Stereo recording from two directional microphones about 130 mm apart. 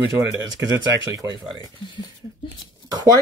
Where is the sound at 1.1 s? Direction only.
30° right (ahead or behind).